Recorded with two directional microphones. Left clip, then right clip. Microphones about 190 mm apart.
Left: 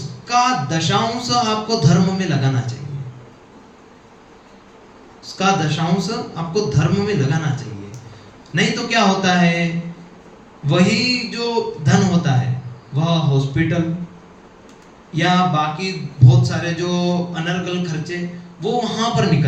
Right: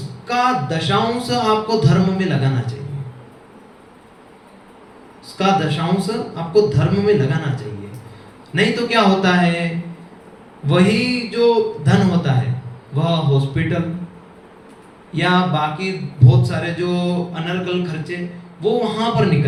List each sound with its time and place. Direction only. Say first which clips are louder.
0.3 s speech: left 1 dB; 15° right (ahead or behind)
5.2 s a man's voice: right 1 dB; 20° right (ahead or behind)
10.7 s a man's voice: even; 20° right (ahead or behind)
15.1 s a man's voice: left 1 dB; 10° right (ahead or behind)